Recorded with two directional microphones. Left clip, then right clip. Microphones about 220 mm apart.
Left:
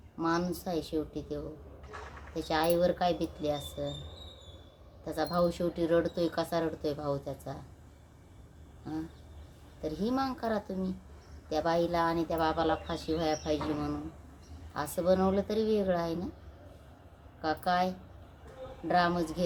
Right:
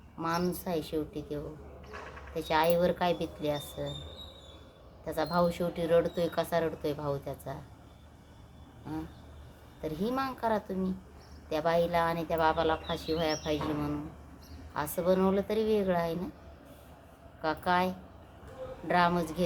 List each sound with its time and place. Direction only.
0.2 s speech: 10° right (ahead or behind)
5.0 s speech: 10° right (ahead or behind)
9.8 s speech: 10° right (ahead or behind)
17.4 s speech: 10° right (ahead or behind)